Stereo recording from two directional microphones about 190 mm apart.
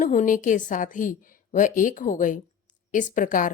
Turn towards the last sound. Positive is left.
turn(degrees=45)  # may be behind; listen again after turning